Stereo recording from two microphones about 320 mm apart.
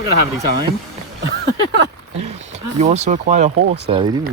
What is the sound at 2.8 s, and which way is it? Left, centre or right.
Speech, right.